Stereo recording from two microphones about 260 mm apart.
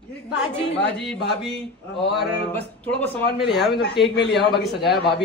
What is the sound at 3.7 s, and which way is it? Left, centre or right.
Speech, left.